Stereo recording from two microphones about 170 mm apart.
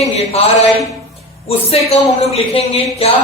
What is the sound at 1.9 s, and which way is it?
A man's voice, 35° left (ahead or behind).